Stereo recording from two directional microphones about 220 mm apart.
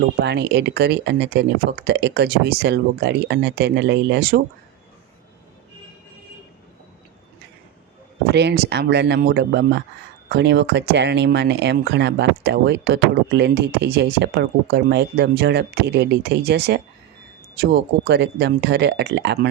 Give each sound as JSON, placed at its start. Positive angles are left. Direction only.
{"t": 0.2, "sound": "speech", "side_deg": -50}
{"t": 8.3, "sound": "speech", "side_deg": -50}